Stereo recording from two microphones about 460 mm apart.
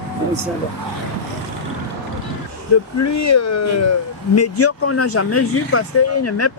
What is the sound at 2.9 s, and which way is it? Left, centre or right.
Speech, left.